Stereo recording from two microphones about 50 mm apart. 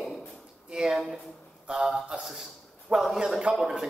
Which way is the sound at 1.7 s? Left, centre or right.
Centre.